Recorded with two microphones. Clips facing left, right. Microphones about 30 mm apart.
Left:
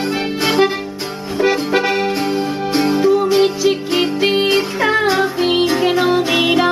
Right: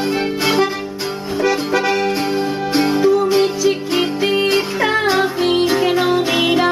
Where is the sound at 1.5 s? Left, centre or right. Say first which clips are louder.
Left 1 dB; left.